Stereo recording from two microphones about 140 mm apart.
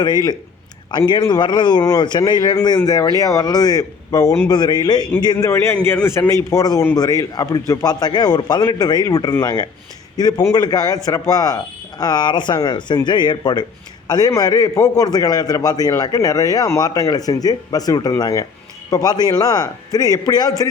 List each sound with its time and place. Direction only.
0.0 s a man's voice: 30° left (ahead or behind)
5.5 s a man's voice: 20° left (ahead or behind)